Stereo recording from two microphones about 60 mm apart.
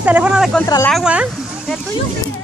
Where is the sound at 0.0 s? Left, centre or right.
Right.